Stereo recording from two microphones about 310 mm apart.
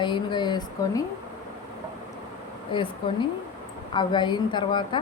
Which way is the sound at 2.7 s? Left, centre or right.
Centre.